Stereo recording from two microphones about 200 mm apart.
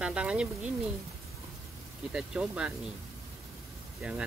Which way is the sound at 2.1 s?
5° right (ahead or behind).